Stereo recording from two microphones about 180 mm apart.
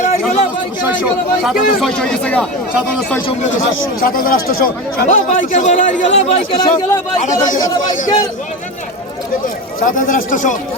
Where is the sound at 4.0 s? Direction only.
55° left (ahead or behind); by 6.7 s 35° left (ahead or behind).